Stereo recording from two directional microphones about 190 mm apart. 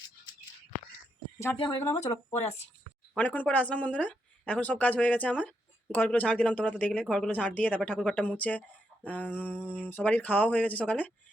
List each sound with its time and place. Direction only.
1.5 s a woman's voice: 30° left (ahead or behind)
3.2 s speech: 10° left (ahead or behind)